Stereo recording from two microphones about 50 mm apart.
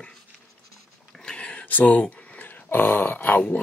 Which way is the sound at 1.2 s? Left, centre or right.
Left.